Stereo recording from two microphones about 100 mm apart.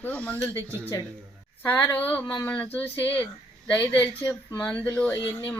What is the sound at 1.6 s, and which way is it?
Speech, 20° left (ahead or behind).